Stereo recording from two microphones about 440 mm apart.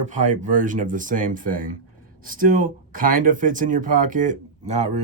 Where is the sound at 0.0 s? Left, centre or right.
Centre.